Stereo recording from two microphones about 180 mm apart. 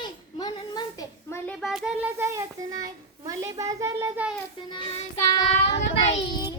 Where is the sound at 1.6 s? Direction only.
Centre (ahead or behind).